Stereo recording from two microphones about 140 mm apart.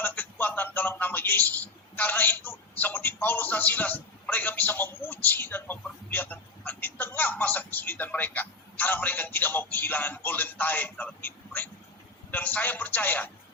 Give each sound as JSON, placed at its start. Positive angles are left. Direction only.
{"t": 0.0, "sound": "a man's voice", "side_deg": 15}